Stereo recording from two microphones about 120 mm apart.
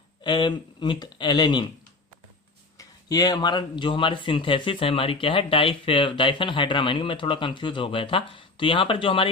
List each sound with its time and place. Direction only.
0.2 s speech: 40° left (ahead or behind)
2.7 s speech: 30° left (ahead or behind)